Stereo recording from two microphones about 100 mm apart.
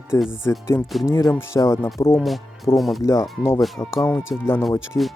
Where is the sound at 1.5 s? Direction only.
30° left (ahead or behind).